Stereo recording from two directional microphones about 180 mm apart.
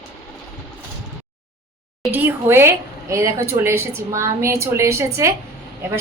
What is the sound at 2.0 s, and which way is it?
A woman's voice, 10° right (ahead or behind).